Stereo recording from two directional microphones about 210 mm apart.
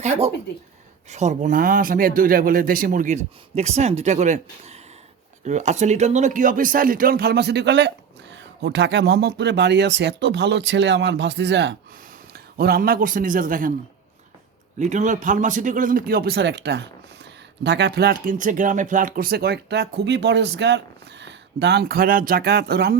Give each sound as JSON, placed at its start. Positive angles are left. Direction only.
{"t": 0.0, "sound": "speech", "side_deg": -30}
{"t": 14.8, "sound": "speech", "side_deg": -35}